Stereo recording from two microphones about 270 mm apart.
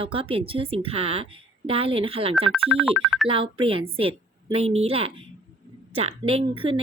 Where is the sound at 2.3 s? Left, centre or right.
Centre.